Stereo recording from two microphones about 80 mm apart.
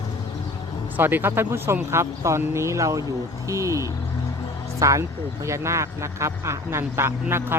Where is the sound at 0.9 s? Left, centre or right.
Right.